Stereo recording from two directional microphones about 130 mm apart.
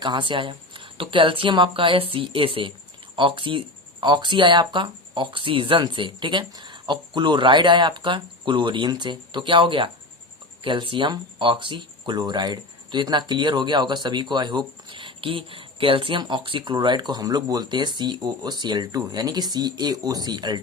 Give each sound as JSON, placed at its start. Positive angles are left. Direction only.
{"t": 0.0, "sound": "speech", "side_deg": -35}